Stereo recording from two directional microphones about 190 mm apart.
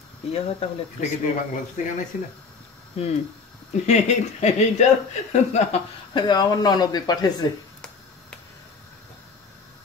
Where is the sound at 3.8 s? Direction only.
35° left (ahead or behind).